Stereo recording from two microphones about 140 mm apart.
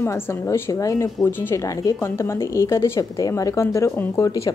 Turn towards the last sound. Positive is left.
turn(degrees=20)  # may be behind; listen again after turning